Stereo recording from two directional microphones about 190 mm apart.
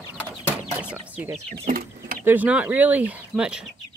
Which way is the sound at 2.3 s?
5° right (ahead or behind).